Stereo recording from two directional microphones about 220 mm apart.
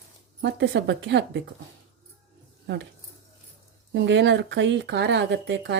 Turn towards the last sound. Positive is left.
turn(degrees=-55)  # may be behind; listen again after turning